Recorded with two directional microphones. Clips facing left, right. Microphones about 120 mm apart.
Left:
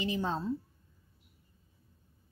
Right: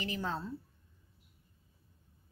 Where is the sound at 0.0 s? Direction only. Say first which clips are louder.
Left 4 dB; 20° left (ahead or behind).